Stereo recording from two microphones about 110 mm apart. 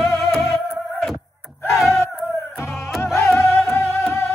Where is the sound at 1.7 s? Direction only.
Centre (ahead or behind).